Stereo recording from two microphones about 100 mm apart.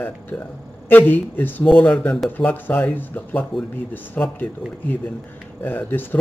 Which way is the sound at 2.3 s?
20° left (ahead or behind).